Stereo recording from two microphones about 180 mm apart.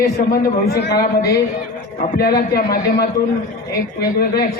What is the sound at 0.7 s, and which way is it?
A man's voice, 60° left (ahead or behind).